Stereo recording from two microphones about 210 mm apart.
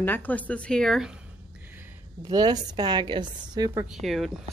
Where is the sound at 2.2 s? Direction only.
20° right (ahead or behind).